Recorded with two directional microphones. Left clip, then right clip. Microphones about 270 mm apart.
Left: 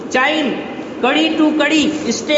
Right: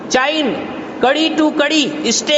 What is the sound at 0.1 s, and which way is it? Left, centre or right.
A man's voice, right.